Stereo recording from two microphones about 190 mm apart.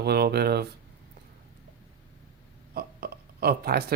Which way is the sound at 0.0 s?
55° right (ahead or behind).